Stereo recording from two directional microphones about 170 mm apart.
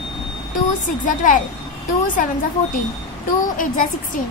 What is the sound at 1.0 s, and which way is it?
Speech, 50° left (ahead or behind).